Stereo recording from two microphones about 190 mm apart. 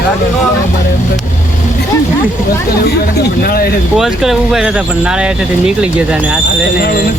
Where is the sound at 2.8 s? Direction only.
55° left (ahead or behind).